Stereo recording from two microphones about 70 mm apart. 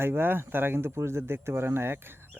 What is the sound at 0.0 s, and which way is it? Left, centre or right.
Speech, right.